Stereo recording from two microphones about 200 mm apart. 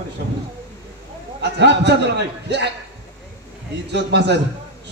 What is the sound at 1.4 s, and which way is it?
A man's voice, 60° right (ahead or behind).